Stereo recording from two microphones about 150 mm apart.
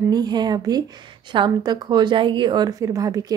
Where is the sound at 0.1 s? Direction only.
25° right (ahead or behind).